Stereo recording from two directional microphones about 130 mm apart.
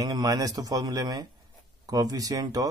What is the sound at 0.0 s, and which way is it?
Speech, 30° right (ahead or behind).